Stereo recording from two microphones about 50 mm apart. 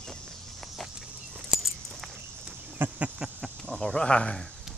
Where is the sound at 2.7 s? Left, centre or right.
Right.